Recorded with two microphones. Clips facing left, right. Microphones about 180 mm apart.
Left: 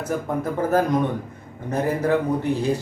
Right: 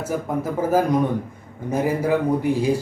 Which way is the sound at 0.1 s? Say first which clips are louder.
Even; 10° right (ahead or behind).